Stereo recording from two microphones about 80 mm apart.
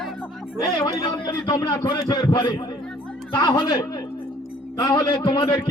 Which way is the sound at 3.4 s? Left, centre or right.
Left.